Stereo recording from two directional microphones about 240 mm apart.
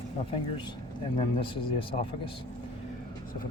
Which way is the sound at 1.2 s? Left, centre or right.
Left.